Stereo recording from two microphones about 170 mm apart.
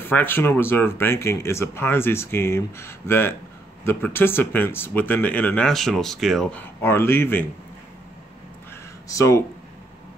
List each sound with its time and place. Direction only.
0.0 s speech: 10° left (ahead or behind)
9.1 s speech: 20° left (ahead or behind)